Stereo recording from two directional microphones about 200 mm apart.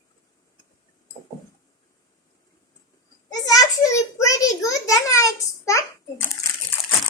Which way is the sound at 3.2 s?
15° left (ahead or behind).